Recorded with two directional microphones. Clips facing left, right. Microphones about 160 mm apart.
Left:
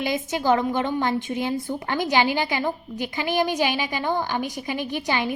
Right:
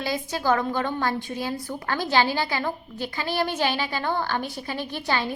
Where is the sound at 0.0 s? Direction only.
20° left (ahead or behind).